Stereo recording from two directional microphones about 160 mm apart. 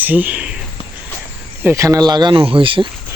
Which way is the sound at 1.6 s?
15° right (ahead or behind).